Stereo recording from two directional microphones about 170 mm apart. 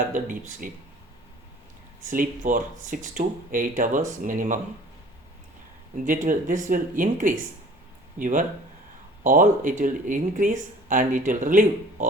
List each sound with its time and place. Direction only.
0.1 s speech: 50° right (ahead or behind)
2.0 s speech: 50° right (ahead or behind)
6.1 s speech: 50° right (ahead or behind)